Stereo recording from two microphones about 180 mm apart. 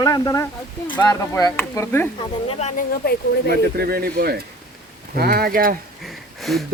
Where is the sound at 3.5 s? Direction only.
55° right (ahead or behind).